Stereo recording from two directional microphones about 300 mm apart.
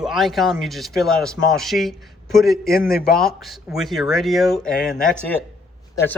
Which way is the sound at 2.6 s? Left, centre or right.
Left.